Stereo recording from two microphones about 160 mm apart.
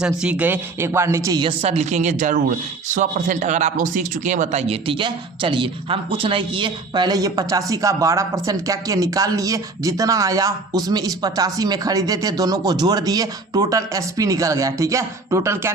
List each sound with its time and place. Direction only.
0.0 s speech: 5° right (ahead or behind)
1.4 s speech: 35° right (ahead or behind); by 15.7 s 15° right (ahead or behind)